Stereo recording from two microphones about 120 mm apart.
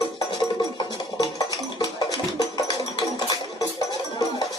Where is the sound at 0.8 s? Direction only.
30° left (ahead or behind).